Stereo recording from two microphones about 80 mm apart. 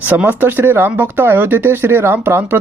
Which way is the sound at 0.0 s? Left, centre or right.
Right.